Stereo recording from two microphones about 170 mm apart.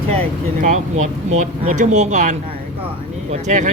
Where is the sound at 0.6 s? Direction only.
45° right (ahead or behind).